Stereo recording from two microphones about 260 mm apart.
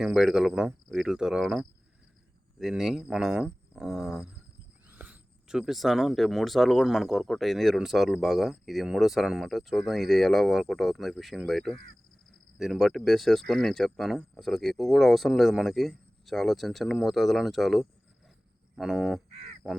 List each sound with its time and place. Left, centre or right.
0.0 s speech: centre
12.3 s a sound: centre
13.1 s speech: centre
19.3 s caw: right